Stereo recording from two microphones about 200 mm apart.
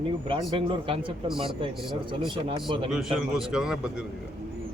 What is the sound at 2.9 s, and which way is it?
Speech, centre (ahead or behind).